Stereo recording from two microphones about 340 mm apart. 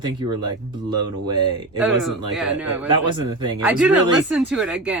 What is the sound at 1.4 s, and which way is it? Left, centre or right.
Speech, centre.